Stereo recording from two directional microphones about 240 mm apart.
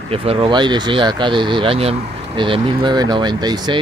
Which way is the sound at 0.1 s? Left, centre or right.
Right.